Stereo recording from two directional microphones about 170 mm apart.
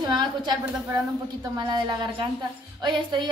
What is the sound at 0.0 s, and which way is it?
A woman's voice, 25° right (ahead or behind).